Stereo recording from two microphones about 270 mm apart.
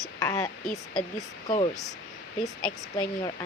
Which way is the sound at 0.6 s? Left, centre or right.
Centre.